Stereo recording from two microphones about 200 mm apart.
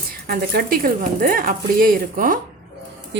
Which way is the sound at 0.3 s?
50° right (ahead or behind).